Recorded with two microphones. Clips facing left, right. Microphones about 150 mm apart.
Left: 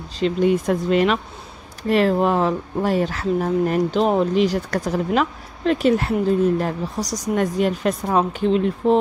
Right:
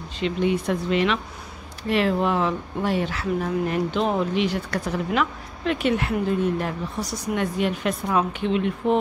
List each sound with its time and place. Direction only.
0.2 s speech: 45° left (ahead or behind)